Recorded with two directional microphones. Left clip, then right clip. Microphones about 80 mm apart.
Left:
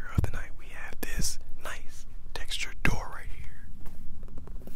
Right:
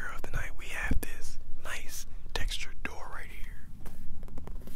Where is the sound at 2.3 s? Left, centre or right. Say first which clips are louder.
Right 4 dB; centre.